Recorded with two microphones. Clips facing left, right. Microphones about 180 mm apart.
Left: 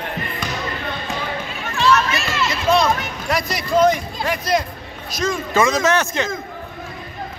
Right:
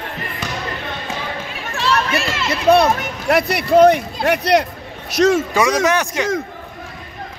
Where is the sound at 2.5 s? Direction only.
60° right (ahead or behind).